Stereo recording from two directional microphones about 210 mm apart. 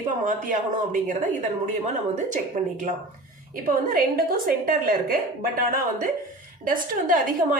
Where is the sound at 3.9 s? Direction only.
45° right (ahead or behind).